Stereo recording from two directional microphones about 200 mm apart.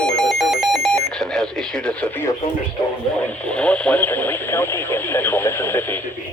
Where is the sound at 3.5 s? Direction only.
5° left (ahead or behind).